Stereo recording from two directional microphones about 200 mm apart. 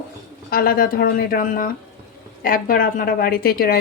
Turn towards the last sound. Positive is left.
turn(degrees=50)  # may be behind; listen again after turning